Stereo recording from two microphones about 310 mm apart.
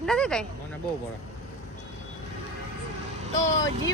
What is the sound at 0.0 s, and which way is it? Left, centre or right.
Speech, centre.